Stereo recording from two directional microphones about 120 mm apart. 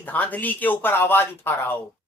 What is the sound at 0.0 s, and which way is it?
Speech, 15° left (ahead or behind).